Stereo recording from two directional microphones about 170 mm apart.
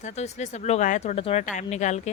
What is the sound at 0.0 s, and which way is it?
A woman's voice, 40° left (ahead or behind).